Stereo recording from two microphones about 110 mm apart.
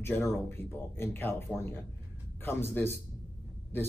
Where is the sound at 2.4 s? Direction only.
20° left (ahead or behind).